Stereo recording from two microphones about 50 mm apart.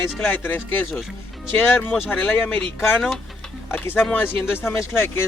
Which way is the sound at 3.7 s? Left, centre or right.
Left.